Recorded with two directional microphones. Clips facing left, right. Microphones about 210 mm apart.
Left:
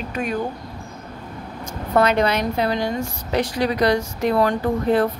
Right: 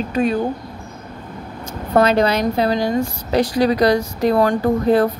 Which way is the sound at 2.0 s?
35° right (ahead or behind).